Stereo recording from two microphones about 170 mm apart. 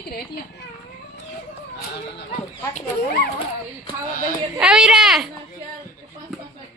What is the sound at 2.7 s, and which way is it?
Speech, 45° left (ahead or behind).